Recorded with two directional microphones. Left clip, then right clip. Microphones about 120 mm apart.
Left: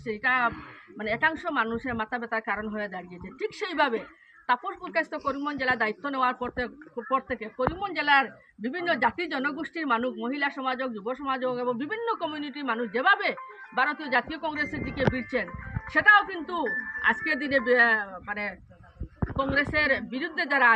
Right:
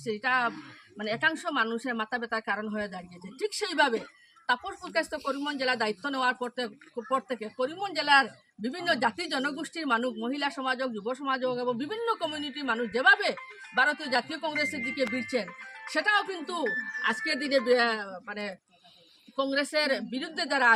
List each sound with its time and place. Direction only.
0.0 s a woman's voice: 30° right (ahead or behind)
19.4 s speech: 35° right (ahead or behind)